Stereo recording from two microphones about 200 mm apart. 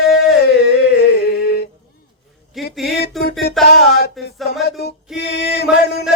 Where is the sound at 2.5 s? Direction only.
Centre (ahead or behind).